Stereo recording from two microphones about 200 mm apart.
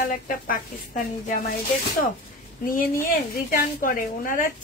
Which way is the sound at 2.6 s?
45° left (ahead or behind).